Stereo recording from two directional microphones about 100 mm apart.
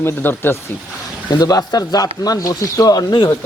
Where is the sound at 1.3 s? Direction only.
40° left (ahead or behind).